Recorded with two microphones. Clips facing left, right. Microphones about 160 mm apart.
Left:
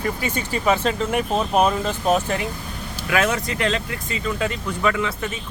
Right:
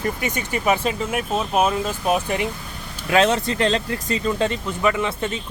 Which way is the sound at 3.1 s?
30° right (ahead or behind).